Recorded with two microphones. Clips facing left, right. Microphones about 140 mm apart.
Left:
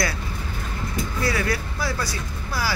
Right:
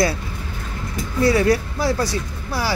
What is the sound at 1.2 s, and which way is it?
Speech, 30° right (ahead or behind).